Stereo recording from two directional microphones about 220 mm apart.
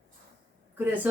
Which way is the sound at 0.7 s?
10° right (ahead or behind).